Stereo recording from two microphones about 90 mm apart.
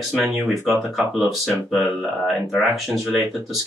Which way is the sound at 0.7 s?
5° right (ahead or behind).